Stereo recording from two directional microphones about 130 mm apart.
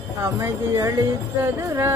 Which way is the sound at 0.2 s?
25° right (ahead or behind).